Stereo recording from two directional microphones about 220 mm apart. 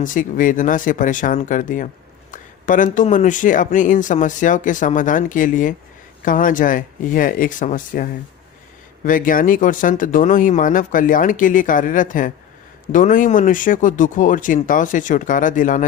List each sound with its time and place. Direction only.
0.0 s speech: 35° left (ahead or behind)